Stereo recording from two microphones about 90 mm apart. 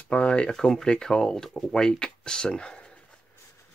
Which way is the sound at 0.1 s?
10° left (ahead or behind).